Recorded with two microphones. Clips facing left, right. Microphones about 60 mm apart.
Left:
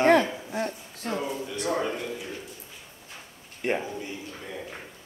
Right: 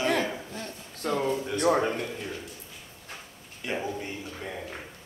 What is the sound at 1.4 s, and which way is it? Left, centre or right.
Speech, right.